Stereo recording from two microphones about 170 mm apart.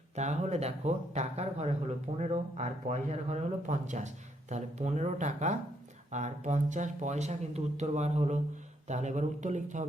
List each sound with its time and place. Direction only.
0.2 s speech: 40° right (ahead or behind)